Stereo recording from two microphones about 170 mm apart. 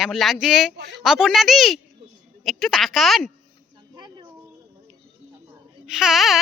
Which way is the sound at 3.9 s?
25° right (ahead or behind).